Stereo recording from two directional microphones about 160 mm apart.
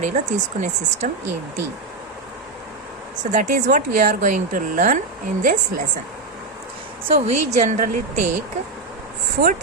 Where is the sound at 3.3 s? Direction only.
50° right (ahead or behind).